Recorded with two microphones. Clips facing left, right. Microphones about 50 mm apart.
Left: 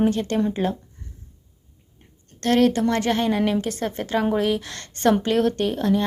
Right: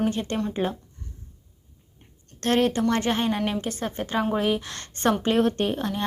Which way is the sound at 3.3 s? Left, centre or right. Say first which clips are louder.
Left 4 dB; centre.